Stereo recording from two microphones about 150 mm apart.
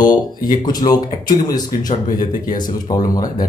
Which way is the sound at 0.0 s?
65° left (ahead or behind).